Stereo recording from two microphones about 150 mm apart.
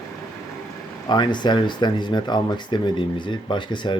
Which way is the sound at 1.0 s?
30° left (ahead or behind).